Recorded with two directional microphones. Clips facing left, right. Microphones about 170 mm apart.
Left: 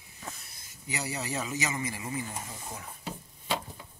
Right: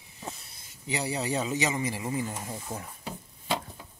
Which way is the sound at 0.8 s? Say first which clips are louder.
Right 5 dB; 30° right (ahead or behind).